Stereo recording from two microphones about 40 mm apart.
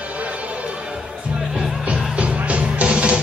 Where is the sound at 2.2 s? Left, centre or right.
Right.